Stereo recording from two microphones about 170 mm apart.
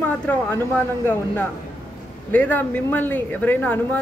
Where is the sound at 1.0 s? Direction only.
10° left (ahead or behind).